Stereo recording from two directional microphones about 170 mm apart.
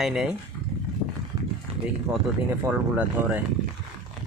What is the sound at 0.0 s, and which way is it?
Speech, 5° right (ahead or behind).